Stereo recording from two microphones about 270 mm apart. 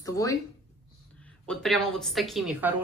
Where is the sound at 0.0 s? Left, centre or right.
Centre.